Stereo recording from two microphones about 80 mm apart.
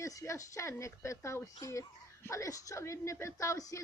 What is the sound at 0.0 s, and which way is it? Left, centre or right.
A man's voice, left.